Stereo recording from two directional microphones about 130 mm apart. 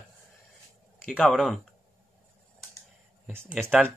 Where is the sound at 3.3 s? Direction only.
15° right (ahead or behind).